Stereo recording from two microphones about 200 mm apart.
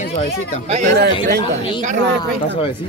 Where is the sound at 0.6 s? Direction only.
35° right (ahead or behind).